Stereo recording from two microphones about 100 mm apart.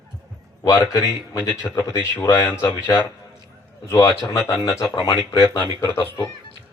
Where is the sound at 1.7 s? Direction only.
35° left (ahead or behind).